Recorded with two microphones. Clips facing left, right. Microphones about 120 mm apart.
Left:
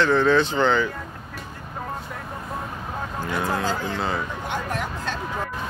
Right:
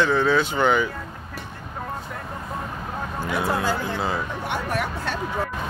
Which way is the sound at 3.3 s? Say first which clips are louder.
Right 1 dB; 10° right (ahead or behind).